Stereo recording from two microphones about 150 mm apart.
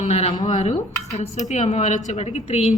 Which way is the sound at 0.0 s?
45° left (ahead or behind).